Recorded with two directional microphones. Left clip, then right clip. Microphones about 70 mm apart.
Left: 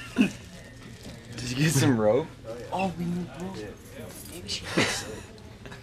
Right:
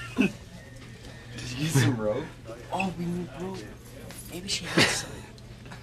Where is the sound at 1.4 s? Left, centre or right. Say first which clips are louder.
Left 5 dB; left.